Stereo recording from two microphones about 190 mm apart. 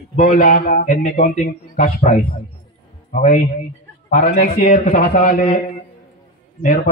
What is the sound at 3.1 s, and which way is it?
A man's voice, 40° left (ahead or behind).